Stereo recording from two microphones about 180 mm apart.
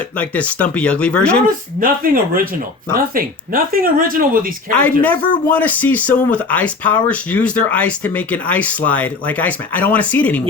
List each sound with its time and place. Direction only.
0.2 s speech: 10° left (ahead or behind)
1.5 s speech: 50° right (ahead or behind)
4.7 s speech: 10° left (ahead or behind)